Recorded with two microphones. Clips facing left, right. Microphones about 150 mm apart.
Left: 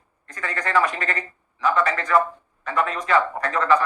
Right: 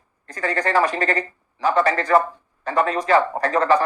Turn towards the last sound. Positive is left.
turn(degrees=-35)  # may be behind; listen again after turning